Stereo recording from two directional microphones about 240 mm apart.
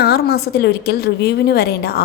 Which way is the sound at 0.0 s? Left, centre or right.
Left.